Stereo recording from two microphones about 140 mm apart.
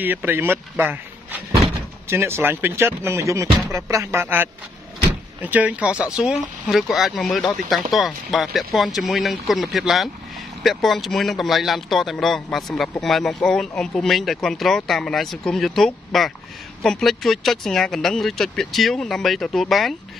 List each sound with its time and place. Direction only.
0.0 s a man's voice: 15° right (ahead or behind)